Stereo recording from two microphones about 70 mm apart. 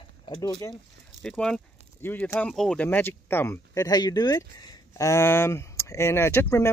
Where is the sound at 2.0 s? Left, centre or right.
Left.